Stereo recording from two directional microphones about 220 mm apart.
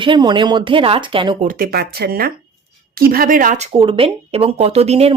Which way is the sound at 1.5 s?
45° right (ahead or behind).